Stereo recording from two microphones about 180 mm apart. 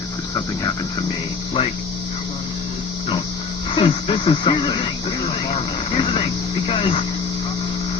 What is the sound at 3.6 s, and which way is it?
Speech, 30° left (ahead or behind).